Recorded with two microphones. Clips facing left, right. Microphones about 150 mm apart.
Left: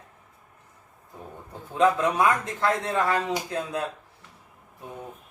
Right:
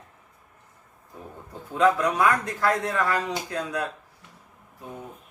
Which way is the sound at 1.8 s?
25° left (ahead or behind).